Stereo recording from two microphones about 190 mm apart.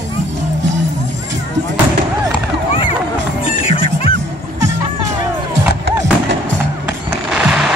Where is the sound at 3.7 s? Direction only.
30° left (ahead or behind).